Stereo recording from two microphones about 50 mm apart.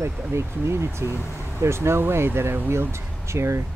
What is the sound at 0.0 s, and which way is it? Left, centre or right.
Speech, right.